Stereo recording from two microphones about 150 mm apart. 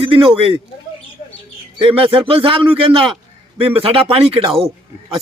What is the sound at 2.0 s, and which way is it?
Speech, 35° right (ahead or behind).